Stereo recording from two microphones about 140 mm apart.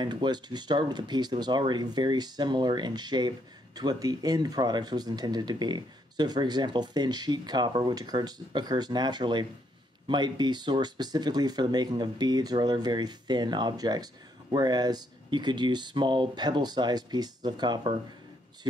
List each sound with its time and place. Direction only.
0.0 s speech: 30° right (ahead or behind)